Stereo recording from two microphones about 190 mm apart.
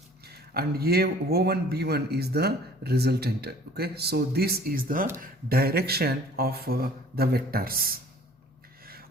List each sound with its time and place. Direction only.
0.5 s a man's voice: 55° right (ahead or behind)